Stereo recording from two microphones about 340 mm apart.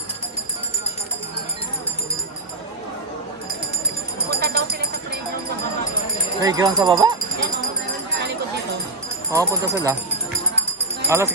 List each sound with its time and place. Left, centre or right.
4.3 s a sound: right
6.4 s speech: centre
9.3 s speech: centre
11.1 s speech: centre